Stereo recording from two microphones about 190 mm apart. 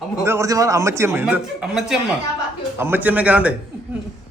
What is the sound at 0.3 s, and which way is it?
A man's voice, 15° right (ahead or behind).